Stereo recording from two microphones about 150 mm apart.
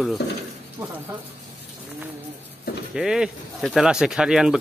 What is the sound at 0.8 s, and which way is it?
Speech, 15° right (ahead or behind).